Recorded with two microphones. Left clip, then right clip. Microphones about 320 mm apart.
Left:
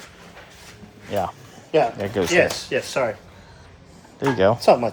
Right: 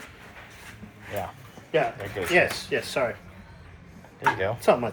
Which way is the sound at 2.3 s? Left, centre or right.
Left.